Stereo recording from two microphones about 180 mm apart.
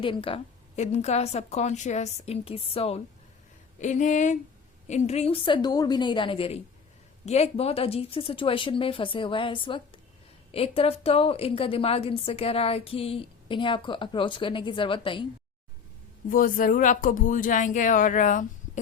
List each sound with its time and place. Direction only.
0.0 s a woman's voice: 30° left (ahead or behind)
16.3 s speech: 50° left (ahead or behind)